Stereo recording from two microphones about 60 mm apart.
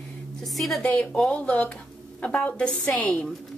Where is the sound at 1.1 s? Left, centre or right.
Centre.